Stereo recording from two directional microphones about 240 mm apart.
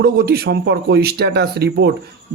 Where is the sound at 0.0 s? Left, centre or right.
Right.